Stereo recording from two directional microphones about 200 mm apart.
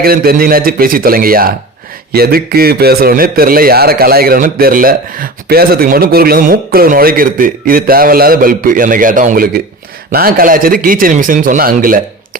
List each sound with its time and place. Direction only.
0.0 s a man's voice: 50° right (ahead or behind)